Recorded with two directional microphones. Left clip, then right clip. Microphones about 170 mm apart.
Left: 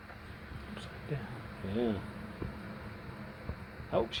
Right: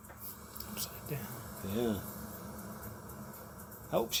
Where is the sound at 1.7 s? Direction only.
45° right (ahead or behind).